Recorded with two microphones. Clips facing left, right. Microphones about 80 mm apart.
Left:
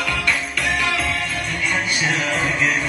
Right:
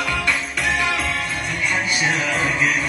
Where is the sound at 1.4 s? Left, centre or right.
Centre.